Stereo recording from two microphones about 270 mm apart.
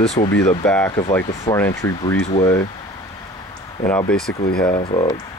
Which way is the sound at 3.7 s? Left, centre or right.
Centre.